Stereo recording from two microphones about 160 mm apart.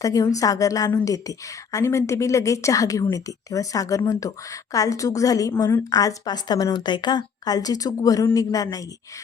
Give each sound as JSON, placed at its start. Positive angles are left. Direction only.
{"t": 0.0, "sound": "a woman's voice", "side_deg": 20}